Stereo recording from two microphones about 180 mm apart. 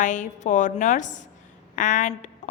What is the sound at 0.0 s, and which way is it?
A woman's voice, 45° left (ahead or behind).